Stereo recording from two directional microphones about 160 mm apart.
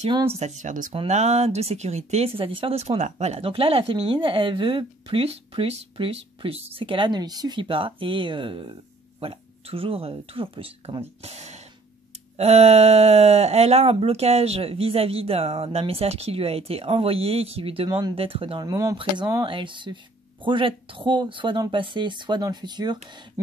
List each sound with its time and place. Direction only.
0.6 s speech: 55° right (ahead or behind)
0.9 s speech: 45° right (ahead or behind)
18.7 s speech: 20° right (ahead or behind)